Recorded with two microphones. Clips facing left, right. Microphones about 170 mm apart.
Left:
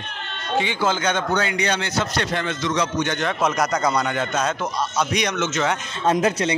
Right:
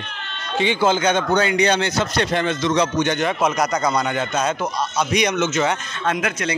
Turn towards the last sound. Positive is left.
turn(degrees=35)  # may be behind; listen again after turning